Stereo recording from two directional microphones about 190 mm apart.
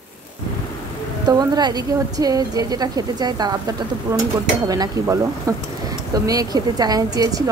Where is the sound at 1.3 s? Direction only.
20° right (ahead or behind).